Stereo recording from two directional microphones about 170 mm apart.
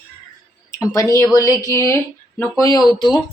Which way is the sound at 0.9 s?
20° left (ahead or behind).